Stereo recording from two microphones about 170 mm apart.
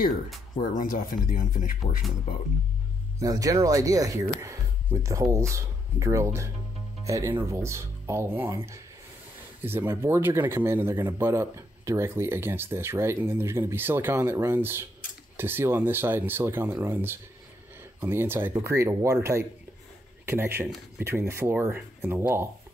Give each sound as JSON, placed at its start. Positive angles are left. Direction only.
{"t": 0.6, "sound": "speech", "side_deg": 55}
{"t": 3.2, "sound": "speech", "side_deg": -20}